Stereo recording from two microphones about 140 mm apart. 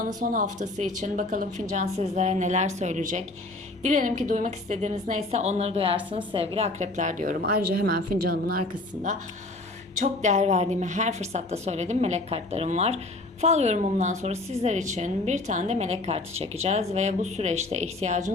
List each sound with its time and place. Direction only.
0.2 s a woman's voice: 70° right (ahead or behind); by 8.6 s 90° right
9.9 s a woman's voice: 60° right (ahead or behind)